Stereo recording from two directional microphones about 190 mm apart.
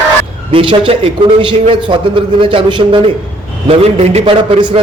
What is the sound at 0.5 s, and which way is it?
A man's voice, 25° right (ahead or behind).